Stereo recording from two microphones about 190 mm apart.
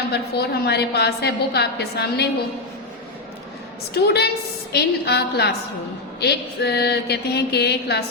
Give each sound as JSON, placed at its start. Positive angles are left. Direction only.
{"t": 0.1, "sound": "a woman's voice", "side_deg": 60}
{"t": 3.9, "sound": "a woman's voice", "side_deg": 60}